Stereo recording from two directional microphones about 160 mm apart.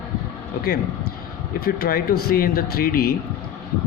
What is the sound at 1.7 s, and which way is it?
Speech, 65° left (ahead or behind).